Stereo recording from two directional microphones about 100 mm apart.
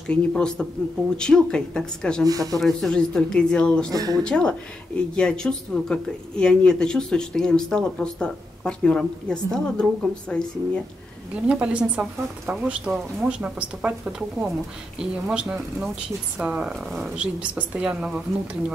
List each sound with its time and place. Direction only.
0.1 s speech: 10° left (ahead or behind)
2.2 s speech: 35° right (ahead or behind)
2.6 s speech: 5° left (ahead or behind)
3.9 s speech: 35° right (ahead or behind)
4.2 s speech: 10° left (ahead or behind)
11.4 s speech: 10° right (ahead or behind)
15.0 s speech: 10° right (ahead or behind)